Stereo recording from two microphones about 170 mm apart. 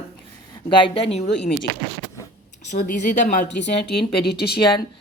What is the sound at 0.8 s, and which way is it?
Speech, 35° left (ahead or behind).